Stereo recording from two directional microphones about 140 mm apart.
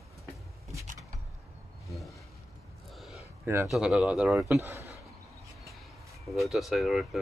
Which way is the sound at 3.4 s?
15° right (ahead or behind).